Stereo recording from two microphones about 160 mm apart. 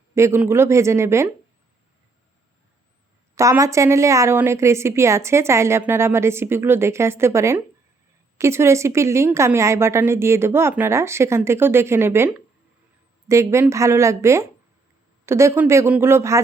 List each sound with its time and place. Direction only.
0.1 s a woman's voice: 15° right (ahead or behind)
3.3 s a woman's voice: 20° right (ahead or behind)